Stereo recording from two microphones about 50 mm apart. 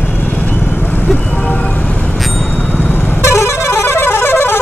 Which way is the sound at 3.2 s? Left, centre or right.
Left.